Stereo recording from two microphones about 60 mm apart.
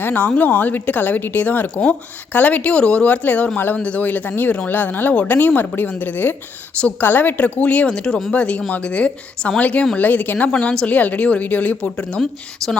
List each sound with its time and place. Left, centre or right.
0.0 s speech: left
7.9 s speech: centre
12.6 s speech: centre